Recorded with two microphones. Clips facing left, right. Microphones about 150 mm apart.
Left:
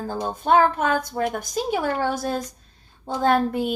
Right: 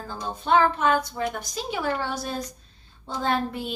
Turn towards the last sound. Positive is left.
turn(degrees=50)  # may be behind; listen again after turning